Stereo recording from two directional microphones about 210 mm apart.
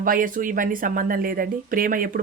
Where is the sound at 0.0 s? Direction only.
40° right (ahead or behind).